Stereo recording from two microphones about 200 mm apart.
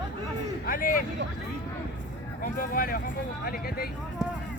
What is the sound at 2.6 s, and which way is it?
Speech, 45° left (ahead or behind).